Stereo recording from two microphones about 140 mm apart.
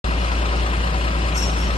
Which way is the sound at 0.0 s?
45° left (ahead or behind).